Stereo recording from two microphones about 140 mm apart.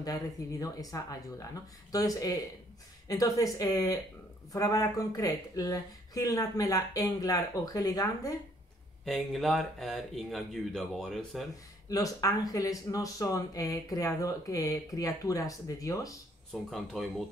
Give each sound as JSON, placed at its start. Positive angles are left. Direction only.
{"t": 0.0, "sound": "speech", "side_deg": 25}
{"t": 9.0, "sound": "speech", "side_deg": 0}
{"t": 11.9, "sound": "speech", "side_deg": 25}
{"t": 16.5, "sound": "speech", "side_deg": 0}